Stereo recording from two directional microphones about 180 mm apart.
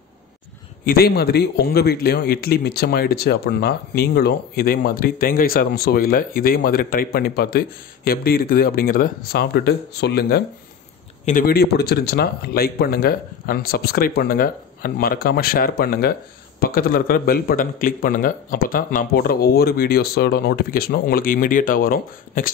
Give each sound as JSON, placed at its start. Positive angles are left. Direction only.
{"t": 0.8, "sound": "speech", "side_deg": 60}
{"t": 11.2, "sound": "speech", "side_deg": 50}